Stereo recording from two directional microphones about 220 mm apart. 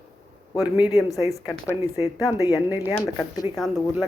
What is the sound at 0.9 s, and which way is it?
Speech, 15° left (ahead or behind).